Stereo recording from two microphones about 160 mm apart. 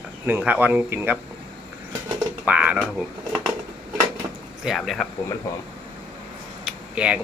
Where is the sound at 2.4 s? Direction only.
10° right (ahead or behind).